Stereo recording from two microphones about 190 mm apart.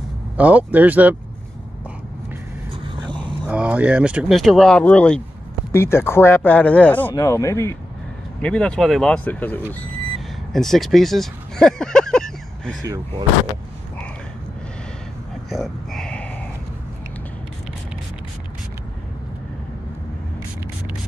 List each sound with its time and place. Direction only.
0.4 s speech: 10° right (ahead or behind)
2.7 s vehicle: 25° right (ahead or behind)
3.4 s speech: 5° right (ahead or behind)
15.5 s a sound: centre (ahead or behind)